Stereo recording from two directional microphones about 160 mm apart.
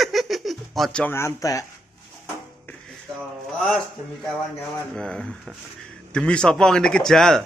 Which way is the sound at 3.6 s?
5° left (ahead or behind).